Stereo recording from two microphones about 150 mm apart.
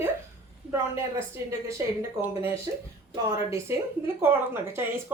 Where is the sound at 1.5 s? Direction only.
20° right (ahead or behind).